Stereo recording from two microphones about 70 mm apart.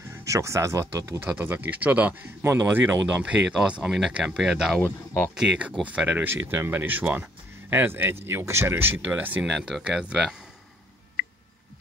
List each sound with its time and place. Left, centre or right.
0.1 s speech: right
1.2 s speech: right
2.4 s speech: right; by 4.7 s centre
4.8 s speech: left
5.3 s speech: centre
6.3 s speech: right
9.8 s speech: centre